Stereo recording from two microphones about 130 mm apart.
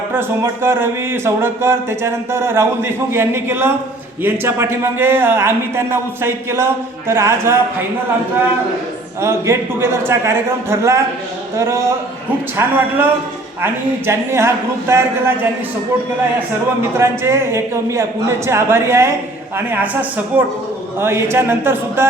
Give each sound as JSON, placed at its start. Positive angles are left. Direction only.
{"t": 0.1, "sound": "speech", "side_deg": -15}
{"t": 9.2, "sound": "speech", "side_deg": -20}
{"t": 14.1, "sound": "speech", "side_deg": -20}
{"t": 17.0, "sound": "speech", "side_deg": -20}